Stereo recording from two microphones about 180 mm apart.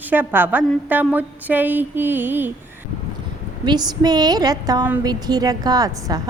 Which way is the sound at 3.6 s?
25° right (ahead or behind).